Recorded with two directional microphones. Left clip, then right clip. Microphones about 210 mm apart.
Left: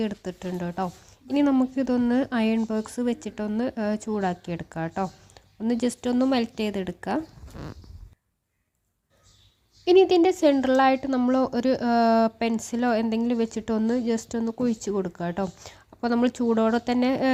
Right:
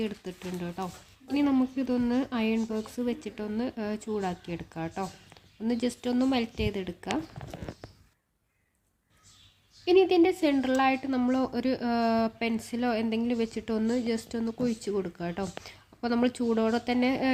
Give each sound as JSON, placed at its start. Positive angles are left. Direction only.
{"t": 0.0, "sound": "speech", "side_deg": 25}
{"t": 9.8, "sound": "speech", "side_deg": 25}